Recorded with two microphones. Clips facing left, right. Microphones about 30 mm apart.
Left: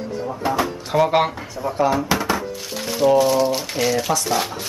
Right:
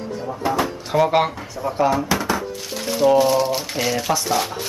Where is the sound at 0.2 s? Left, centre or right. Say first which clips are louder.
Even; centre.